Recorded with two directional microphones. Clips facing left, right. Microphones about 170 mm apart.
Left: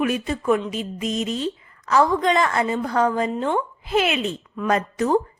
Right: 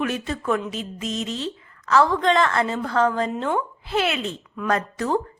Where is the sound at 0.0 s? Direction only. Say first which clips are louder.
Left 3 dB; 10° left (ahead or behind).